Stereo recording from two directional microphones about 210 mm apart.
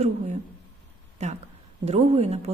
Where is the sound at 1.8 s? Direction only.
30° right (ahead or behind).